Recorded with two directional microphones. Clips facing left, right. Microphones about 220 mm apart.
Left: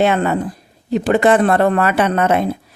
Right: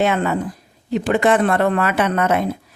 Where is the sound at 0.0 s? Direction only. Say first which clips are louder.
Left 3 dB; 35° left (ahead or behind).